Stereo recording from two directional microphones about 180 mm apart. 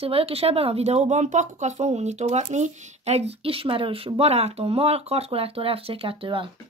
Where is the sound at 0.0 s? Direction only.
35° right (ahead or behind).